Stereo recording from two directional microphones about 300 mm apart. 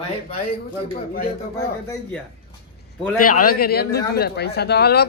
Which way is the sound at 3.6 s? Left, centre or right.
Left.